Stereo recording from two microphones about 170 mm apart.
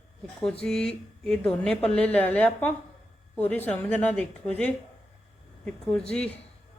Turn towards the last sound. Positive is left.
turn(degrees=5)  # may be behind; listen again after turning